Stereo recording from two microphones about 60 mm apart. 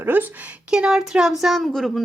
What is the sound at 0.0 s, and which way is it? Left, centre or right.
Speech, right.